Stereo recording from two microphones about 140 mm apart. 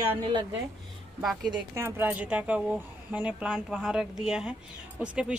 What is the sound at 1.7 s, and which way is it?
Speech, 15° right (ahead or behind).